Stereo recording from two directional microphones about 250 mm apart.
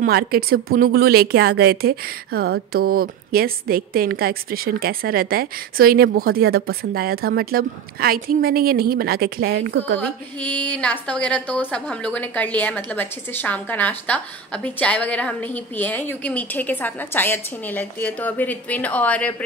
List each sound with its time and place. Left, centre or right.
0.0 s a woman's voice: right
9.9 s a woman's voice: centre